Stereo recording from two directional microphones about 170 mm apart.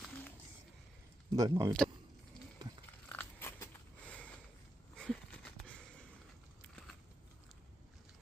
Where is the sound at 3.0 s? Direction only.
10° left (ahead or behind).